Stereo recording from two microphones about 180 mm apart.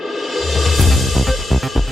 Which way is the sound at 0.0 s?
Centre (ahead or behind).